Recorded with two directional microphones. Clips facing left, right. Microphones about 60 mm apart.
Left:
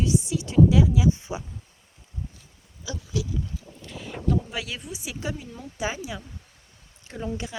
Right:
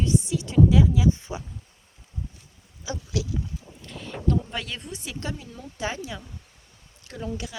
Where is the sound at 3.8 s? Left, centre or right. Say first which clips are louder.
Even; centre.